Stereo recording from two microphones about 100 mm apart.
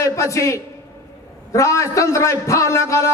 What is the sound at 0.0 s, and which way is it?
A man's voice, 30° left (ahead or behind).